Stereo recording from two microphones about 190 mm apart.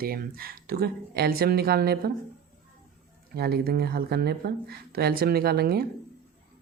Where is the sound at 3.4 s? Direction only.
55° right (ahead or behind).